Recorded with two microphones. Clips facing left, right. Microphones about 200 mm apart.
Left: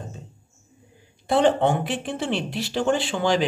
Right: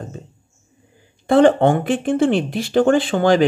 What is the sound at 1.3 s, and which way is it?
Speech, 50° right (ahead or behind).